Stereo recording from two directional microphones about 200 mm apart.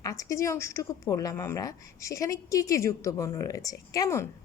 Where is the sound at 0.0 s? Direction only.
15° left (ahead or behind).